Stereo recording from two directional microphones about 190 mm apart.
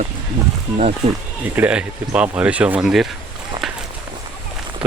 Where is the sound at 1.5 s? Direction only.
5° right (ahead or behind).